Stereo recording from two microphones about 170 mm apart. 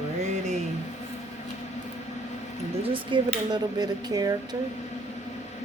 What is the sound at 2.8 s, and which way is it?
Speech, 35° right (ahead or behind).